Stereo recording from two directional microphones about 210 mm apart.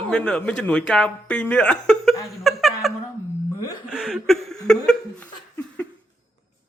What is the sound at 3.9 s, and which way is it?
Laughter, centre (ahead or behind).